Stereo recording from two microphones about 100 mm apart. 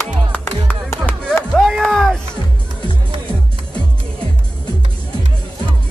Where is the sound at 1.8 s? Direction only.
5° left (ahead or behind).